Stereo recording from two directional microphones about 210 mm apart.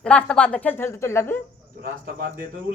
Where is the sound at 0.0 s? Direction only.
5° left (ahead or behind).